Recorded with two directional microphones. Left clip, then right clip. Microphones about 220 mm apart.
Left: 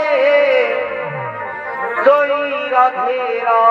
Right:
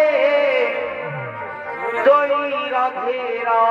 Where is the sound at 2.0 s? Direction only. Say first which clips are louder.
Left 2 dB; 10° left (ahead or behind).